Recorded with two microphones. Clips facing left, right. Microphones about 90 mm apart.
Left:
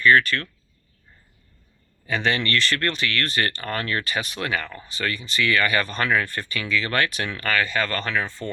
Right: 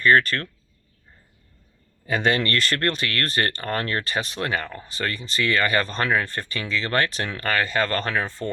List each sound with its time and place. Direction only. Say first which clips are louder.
0.0 s speech: even; 40° right (ahead or behind)
2.0 s speech: right 2 dB; 40° right (ahead or behind)